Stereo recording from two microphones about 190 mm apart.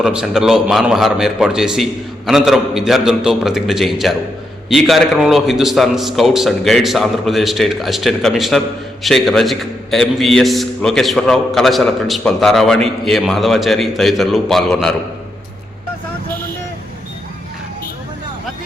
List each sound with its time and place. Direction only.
0.0 s a man's voice: 5° right (ahead or behind)